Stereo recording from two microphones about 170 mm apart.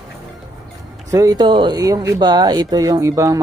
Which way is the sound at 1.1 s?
20° right (ahead or behind).